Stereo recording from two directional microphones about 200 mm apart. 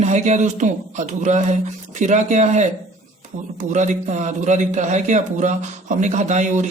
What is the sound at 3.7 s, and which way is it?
Speech, 35° right (ahead or behind).